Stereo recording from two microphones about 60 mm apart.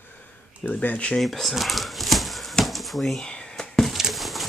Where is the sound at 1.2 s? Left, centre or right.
Centre.